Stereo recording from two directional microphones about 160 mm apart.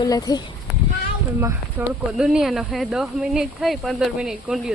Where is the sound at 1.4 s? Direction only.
15° right (ahead or behind).